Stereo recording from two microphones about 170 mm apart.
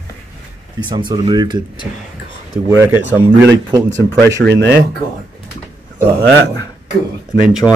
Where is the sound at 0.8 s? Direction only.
25° right (ahead or behind).